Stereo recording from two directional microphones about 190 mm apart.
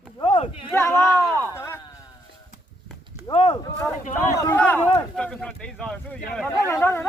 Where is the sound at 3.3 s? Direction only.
25° left (ahead or behind).